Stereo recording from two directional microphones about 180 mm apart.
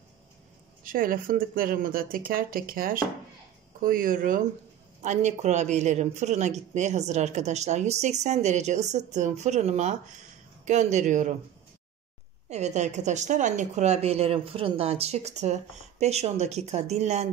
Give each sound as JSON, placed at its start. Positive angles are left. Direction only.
{"t": 0.8, "sound": "speech", "side_deg": -50}
{"t": 12.4, "sound": "speech", "side_deg": -40}